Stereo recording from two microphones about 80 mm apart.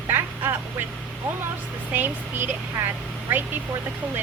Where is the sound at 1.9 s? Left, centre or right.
Right.